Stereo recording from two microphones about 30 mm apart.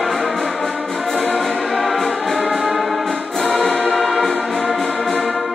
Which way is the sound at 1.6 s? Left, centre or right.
Centre.